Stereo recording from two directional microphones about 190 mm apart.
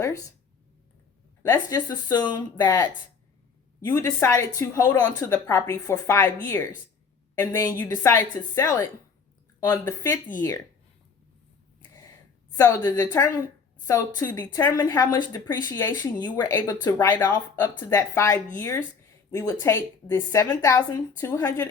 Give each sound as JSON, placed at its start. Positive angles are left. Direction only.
{"t": 1.4, "sound": "a woman's voice", "side_deg": 10}
{"t": 1.7, "sound": "a woman's voice", "side_deg": 20}
{"t": 12.5, "sound": "a woman's voice", "side_deg": 15}